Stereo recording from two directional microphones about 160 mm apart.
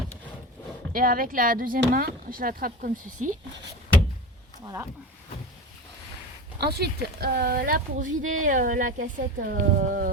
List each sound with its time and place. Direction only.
0.9 s speech: 60° right (ahead or behind)
4.6 s speech: 20° right (ahead or behind)
6.6 s speech: 90° right; by 10.1 s 60° right (ahead or behind)